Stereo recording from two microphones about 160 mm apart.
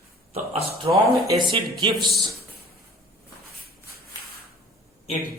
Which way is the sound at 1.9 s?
Centre (ahead or behind).